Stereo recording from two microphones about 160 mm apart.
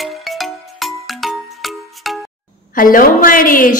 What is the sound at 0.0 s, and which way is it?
Music, centre (ahead or behind).